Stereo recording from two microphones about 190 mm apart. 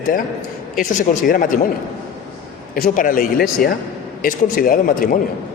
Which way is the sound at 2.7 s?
45° left (ahead or behind).